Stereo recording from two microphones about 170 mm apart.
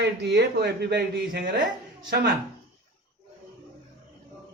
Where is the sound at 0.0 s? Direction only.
75° right (ahead or behind).